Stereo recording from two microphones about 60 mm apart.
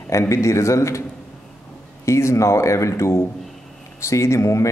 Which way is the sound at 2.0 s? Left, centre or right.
Left.